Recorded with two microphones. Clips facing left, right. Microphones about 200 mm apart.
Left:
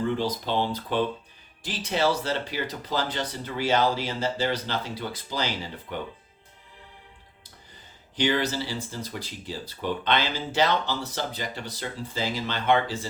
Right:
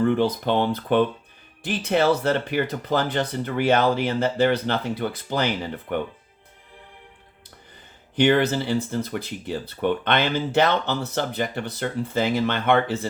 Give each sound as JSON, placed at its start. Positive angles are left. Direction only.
{"t": 0.0, "sound": "speech", "side_deg": -55}
{"t": 8.1, "sound": "speech", "side_deg": -55}